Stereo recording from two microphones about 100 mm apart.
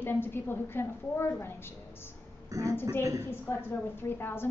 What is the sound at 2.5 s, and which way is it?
Speech, 30° right (ahead or behind).